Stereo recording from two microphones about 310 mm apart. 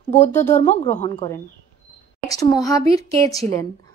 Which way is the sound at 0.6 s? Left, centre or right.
Left.